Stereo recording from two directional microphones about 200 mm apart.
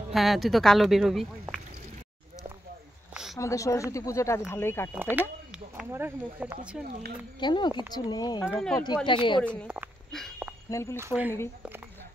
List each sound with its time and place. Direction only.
0.1 s a woman's voice: centre (ahead or behind)
3.3 s speech: 15° left (ahead or behind)
4.9 s speech: 10° right (ahead or behind)
7.3 s speech: 20° left (ahead or behind)
8.5 s a woman's voice: centre (ahead or behind)
8.8 s speech: 20° left (ahead or behind)
9.7 s speech: centre (ahead or behind)
10.7 s speech: 15° left (ahead or behind)
11.0 s speech: 10° right (ahead or behind)